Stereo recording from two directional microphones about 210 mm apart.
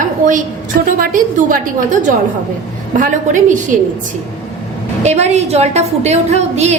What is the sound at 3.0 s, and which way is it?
Speech, 35° right (ahead or behind).